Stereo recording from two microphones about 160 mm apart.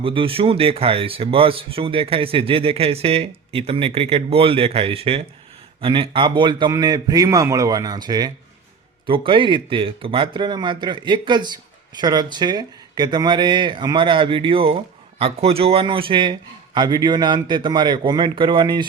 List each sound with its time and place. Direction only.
0.0 s speech: 35° right (ahead or behind)